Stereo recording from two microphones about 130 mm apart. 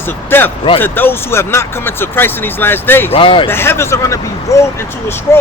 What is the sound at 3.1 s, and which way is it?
Speech, 45° left (ahead or behind).